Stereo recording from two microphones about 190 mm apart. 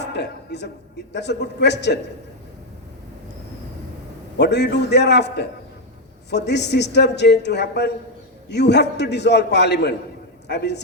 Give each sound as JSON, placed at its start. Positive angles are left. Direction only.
{"t": 0.0, "sound": "a man's voice", "side_deg": 65}
{"t": 4.4, "sound": "a man's voice", "side_deg": 65}